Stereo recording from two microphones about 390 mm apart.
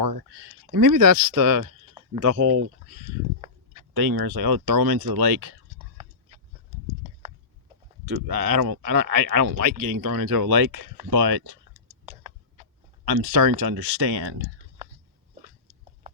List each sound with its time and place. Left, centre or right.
0.0 s speech: right
3.9 s speech: right
8.0 s speech: right
13.1 s speech: right